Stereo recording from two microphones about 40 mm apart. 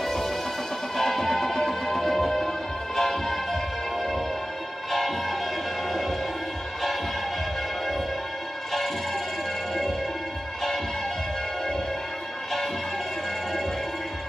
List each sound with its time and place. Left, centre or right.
0.0 s music: centre